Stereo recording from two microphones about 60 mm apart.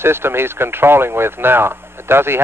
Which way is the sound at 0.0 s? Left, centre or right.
Right.